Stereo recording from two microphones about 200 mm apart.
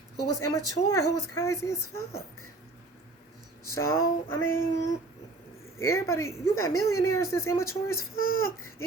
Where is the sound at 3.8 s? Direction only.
90° left.